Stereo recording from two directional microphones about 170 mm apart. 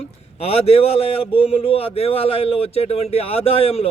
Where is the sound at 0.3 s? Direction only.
35° left (ahead or behind).